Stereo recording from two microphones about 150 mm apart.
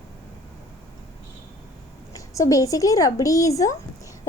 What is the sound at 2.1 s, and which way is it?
A woman's voice, 20° left (ahead or behind).